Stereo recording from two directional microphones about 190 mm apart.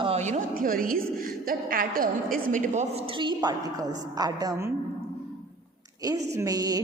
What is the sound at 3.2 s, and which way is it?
A woman's voice, 25° right (ahead or behind).